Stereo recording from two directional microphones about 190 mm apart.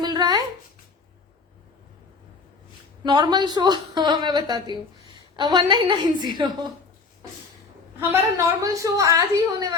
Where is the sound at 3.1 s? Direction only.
20° right (ahead or behind).